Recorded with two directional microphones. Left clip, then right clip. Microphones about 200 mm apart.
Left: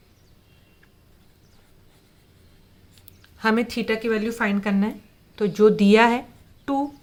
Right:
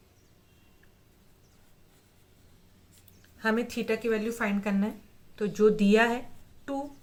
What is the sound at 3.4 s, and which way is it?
Speech, 30° left (ahead or behind).